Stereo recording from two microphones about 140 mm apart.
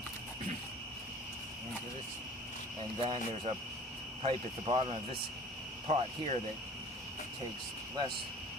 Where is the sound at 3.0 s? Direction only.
40° right (ahead or behind).